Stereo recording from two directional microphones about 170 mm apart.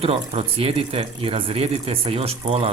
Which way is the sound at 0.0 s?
35° right (ahead or behind).